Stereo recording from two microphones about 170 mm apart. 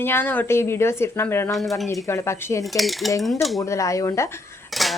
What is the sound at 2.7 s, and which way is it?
Cutlery, centre (ahead or behind).